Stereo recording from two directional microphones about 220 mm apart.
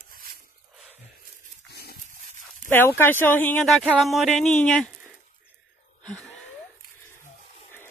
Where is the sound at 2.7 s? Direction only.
10° left (ahead or behind).